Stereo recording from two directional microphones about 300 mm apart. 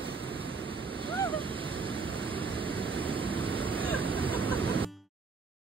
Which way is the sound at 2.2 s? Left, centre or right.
Centre.